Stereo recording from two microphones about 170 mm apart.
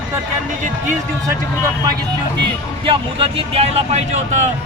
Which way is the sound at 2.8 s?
30° right (ahead or behind).